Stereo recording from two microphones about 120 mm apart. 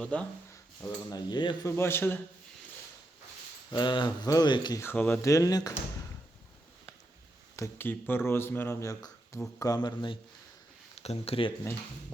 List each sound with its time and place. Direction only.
0.0 s speech: 10° left (ahead or behind)
1.1 s speech: 35° left (ahead or behind)
1.6 s speech: 20° left (ahead or behind)
3.7 s speech: 40° left (ahead or behind)
4.8 s speech: 15° left (ahead or behind)
5.2 s speech: 25° left (ahead or behind)
7.5 s speech: 20° left (ahead or behind); by 10.2 s 40° left (ahead or behind)
10.9 s speech: 60° left (ahead or behind)